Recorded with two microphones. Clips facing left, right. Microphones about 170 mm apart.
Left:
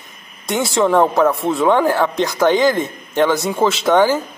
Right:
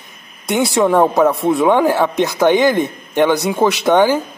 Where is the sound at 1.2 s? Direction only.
15° right (ahead or behind).